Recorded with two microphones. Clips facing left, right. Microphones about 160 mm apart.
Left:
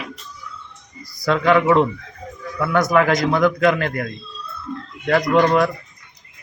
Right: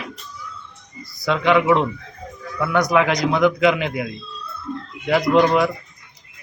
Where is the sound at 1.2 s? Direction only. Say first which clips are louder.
Left 1 dB; centre (ahead or behind).